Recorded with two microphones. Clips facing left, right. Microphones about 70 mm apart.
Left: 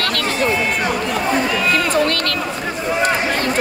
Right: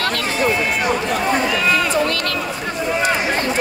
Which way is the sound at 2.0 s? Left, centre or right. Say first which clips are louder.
Left 1 dB; left.